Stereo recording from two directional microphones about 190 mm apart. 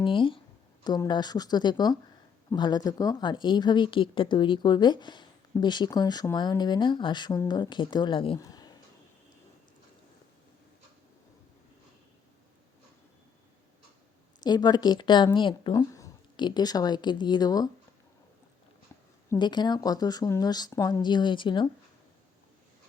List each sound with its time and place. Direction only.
0.0 s speech: 25° left (ahead or behind)
14.4 s speech: 20° left (ahead or behind)
19.3 s speech: 20° left (ahead or behind)